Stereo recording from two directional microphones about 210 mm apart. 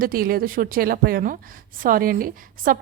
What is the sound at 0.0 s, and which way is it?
A woman's voice, 45° right (ahead or behind).